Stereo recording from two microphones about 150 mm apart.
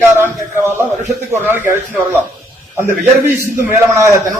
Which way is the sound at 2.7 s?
15° right (ahead or behind).